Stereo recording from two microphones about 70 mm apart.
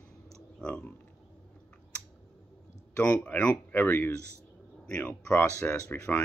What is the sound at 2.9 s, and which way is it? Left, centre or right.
Speech, centre.